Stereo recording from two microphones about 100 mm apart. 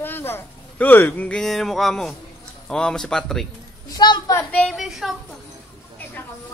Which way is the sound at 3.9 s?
50° left (ahead or behind).